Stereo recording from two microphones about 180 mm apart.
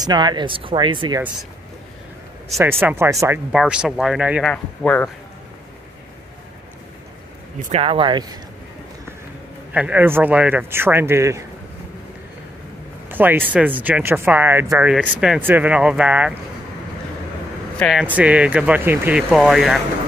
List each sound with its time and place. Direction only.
0.0 s speech: 25° right (ahead or behind)
2.8 s speech: 15° right (ahead or behind); by 5.1 s 5° left (ahead or behind)
7.6 s speech: 35° right (ahead or behind)
9.7 s speech: 10° right (ahead or behind)
13.1 s speech: 10° right (ahead or behind)
17.7 s speech: centre (ahead or behind)